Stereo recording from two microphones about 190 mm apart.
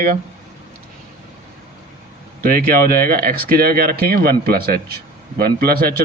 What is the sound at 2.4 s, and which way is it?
Speech, 50° right (ahead or behind).